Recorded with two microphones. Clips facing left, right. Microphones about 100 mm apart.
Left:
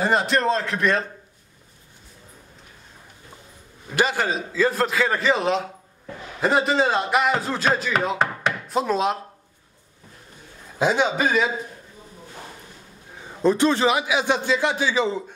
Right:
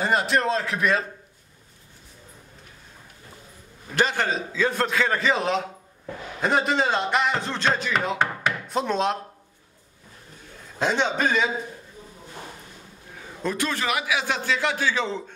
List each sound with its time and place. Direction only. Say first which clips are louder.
0.0 s speech: left 2 dB; centre (ahead or behind)
3.9 s speech: left 1 dB; 5° left (ahead or behind)
10.8 s speech: left 3 dB; 5° left (ahead or behind)
13.4 s a man's voice: left 9 dB; 30° left (ahead or behind); by 15.3 s 10° left (ahead or behind)